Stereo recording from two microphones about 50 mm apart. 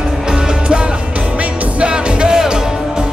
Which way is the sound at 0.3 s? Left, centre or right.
Centre.